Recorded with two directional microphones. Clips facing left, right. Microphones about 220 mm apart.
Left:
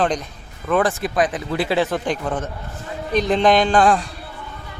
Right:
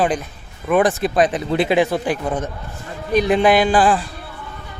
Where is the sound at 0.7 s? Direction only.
15° right (ahead or behind).